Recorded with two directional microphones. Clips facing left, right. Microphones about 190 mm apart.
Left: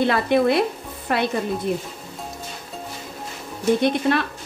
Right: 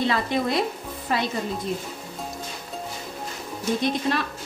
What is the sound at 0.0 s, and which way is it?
A woman's voice, 60° left (ahead or behind).